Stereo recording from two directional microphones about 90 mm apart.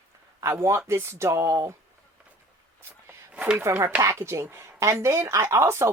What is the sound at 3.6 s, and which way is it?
Speech, 25° right (ahead or behind).